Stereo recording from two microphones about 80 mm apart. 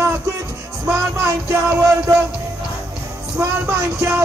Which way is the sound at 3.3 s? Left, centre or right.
Right.